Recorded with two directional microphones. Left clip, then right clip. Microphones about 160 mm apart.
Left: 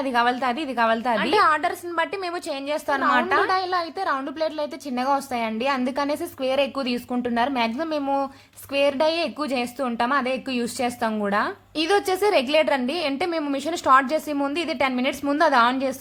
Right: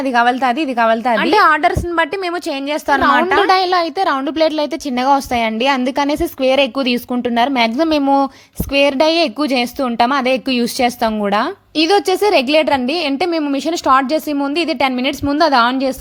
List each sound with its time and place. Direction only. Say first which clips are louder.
0.0 s a woman's voice: right 8 dB; 30° right (ahead or behind)